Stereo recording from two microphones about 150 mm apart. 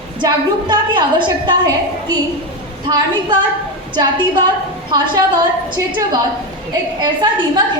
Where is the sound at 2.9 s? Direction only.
35° right (ahead or behind).